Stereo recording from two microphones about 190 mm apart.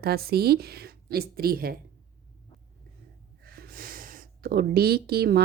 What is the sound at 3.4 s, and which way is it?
Speech, 55° right (ahead or behind).